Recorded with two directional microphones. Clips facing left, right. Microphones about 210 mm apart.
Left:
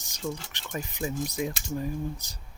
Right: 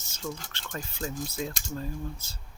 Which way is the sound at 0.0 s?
15° left (ahead or behind).